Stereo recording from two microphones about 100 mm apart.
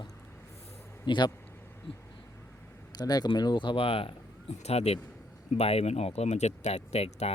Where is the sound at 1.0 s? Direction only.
50° left (ahead or behind).